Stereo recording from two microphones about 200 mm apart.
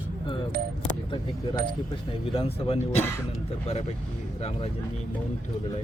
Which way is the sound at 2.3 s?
30° left (ahead or behind).